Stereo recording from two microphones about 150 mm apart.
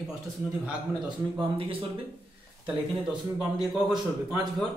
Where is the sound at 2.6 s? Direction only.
5° right (ahead or behind).